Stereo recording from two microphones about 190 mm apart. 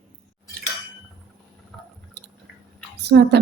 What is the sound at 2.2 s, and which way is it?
Chewing, 60° right (ahead or behind).